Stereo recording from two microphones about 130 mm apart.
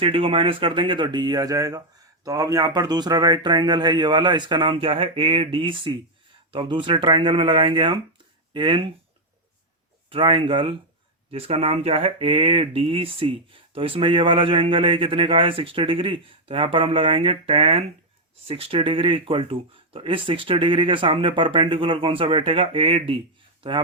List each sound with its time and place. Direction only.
0.0 s speech: 45° right (ahead or behind)
10.1 s speech: 40° right (ahead or behind)